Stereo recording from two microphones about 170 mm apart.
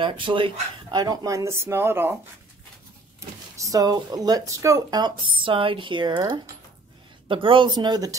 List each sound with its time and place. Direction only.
0.0 s speech: 30° right (ahead or behind); by 2.1 s 15° right (ahead or behind)
3.2 s speech: 20° right (ahead or behind)